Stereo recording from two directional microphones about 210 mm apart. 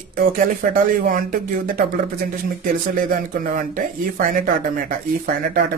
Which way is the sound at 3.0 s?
40° right (ahead or behind).